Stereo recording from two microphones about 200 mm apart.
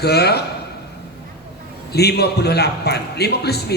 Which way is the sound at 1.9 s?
55° left (ahead or behind).